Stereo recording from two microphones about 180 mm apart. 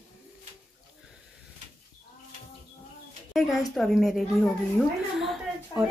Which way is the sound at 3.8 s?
Centre (ahead or behind).